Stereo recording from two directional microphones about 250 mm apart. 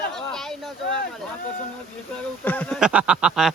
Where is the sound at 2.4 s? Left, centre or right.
Centre.